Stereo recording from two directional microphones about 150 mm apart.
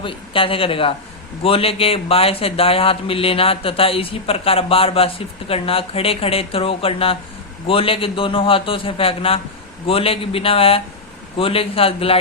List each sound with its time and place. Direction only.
0.0 s speech: 35° left (ahead or behind)